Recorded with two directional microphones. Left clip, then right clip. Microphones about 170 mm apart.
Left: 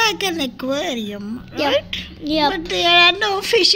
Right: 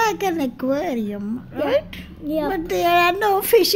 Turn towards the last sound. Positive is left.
turn(degrees=-40)  # may be behind; listen again after turning